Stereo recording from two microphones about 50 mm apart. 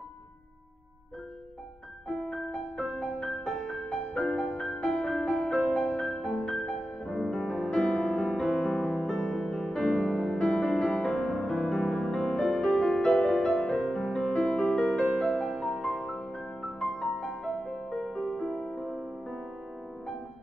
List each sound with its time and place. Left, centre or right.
2.2 s music: centre
6.0 s music: centre
10.3 s music: centre
13.0 s music: left
13.9 s music: centre
14.5 s music: centre
15.9 s music: centre